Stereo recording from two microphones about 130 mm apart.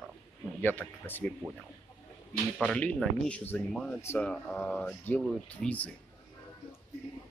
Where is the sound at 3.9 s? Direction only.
20° left (ahead or behind).